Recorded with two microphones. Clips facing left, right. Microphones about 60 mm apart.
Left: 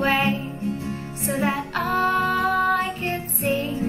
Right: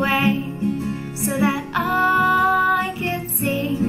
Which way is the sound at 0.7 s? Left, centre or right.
Right.